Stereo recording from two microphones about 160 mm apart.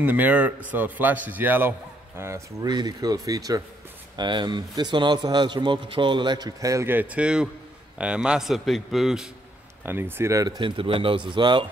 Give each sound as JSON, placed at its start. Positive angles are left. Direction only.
{"t": 0.0, "sound": "a man's voice", "side_deg": -10}
{"t": 9.8, "sound": "speech", "side_deg": -15}